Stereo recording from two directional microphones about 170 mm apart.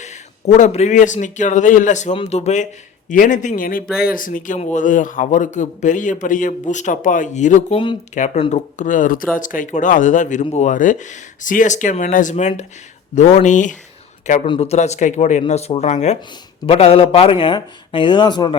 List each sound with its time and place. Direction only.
0.0 s a man's voice: 40° left (ahead or behind)
14.4 s a man's voice: 35° left (ahead or behind)